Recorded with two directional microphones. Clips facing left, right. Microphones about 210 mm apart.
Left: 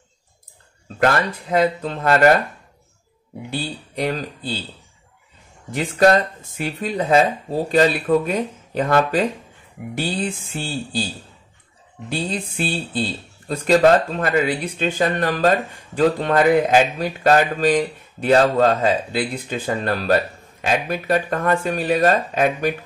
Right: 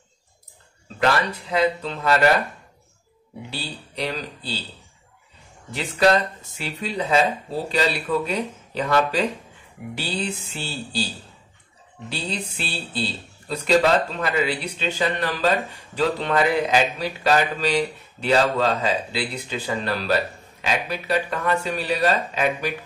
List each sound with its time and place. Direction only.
0.9 s speech: 50° left (ahead or behind)
3.4 s speech: 50° left (ahead or behind)
5.7 s speech: 50° left (ahead or behind)
12.1 s speech: 50° left (ahead or behind)